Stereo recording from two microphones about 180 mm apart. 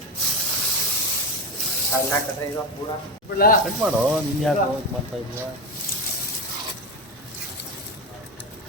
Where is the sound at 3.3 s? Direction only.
55° left (ahead or behind).